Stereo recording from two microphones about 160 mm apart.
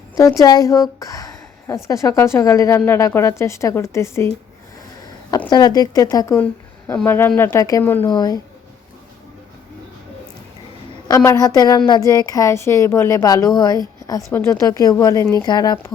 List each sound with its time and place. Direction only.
0.2 s speech: 20° left (ahead or behind)
5.5 s speech: 25° left (ahead or behind)
11.1 s speech: 20° left (ahead or behind)